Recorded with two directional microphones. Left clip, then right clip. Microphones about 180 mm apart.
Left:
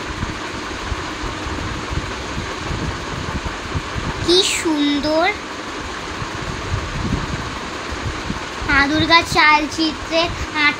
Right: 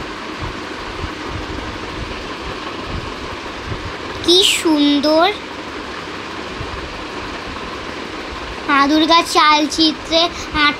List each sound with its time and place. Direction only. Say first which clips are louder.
4.3 s a child's voice: right 4 dB; 15° right (ahead or behind)
8.6 s a child's voice: right 2 dB; 15° right (ahead or behind)